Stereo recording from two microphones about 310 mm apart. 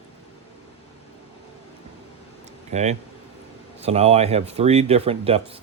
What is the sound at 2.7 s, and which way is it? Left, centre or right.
Speech, right.